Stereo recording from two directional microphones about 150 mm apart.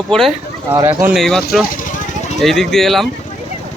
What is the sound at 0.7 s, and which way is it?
Speech, 25° right (ahead or behind).